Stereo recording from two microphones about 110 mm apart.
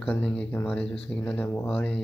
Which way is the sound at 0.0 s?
15° left (ahead or behind).